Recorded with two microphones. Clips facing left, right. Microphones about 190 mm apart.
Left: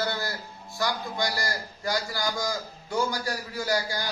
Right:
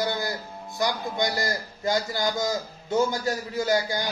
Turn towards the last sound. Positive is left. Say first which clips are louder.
# right 4 dB
turn(degrees=-20)  # may be behind; listen again after turning